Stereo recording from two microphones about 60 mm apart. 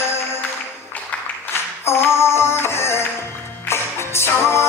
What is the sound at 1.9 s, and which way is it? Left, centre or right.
Music, left.